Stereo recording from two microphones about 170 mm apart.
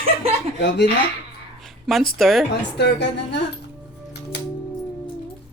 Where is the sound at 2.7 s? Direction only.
85° left.